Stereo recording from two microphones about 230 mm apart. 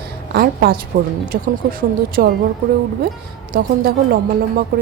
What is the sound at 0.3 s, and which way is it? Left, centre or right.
Speech, right.